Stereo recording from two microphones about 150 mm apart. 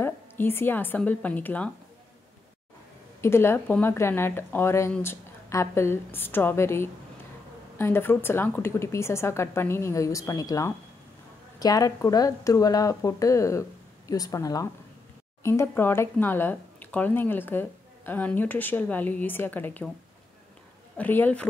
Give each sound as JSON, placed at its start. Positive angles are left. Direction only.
{"t": 0.0, "sound": "speech", "side_deg": 15}
{"t": 3.2, "sound": "speech", "side_deg": 15}
{"t": 21.0, "sound": "speech", "side_deg": 10}